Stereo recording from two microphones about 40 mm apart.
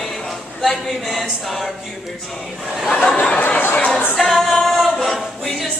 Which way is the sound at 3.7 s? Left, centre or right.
Left.